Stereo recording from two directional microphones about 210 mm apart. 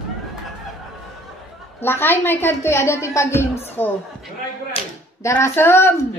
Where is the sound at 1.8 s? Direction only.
10° left (ahead or behind).